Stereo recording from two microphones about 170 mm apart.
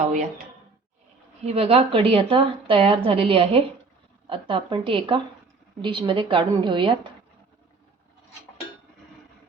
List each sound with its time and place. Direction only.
1.5 s a woman's voice: 35° right (ahead or behind)